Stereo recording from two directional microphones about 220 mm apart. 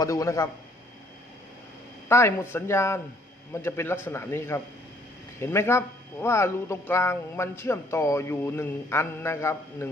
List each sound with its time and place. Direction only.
0.0 s speech: 15° left (ahead or behind)
2.0 s speech: 10° left (ahead or behind)